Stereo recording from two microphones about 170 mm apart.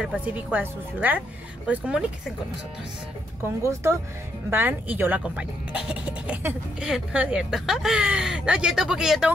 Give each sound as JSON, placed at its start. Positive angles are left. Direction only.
{"t": 0.0, "sound": "speech", "side_deg": -10}
{"t": 4.5, "sound": "speech", "side_deg": -10}